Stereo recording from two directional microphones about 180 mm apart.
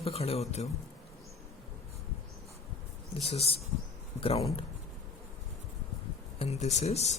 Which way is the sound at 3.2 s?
35° left (ahead or behind).